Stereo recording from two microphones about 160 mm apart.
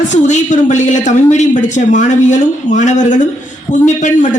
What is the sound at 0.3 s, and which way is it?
Speech, 50° left (ahead or behind).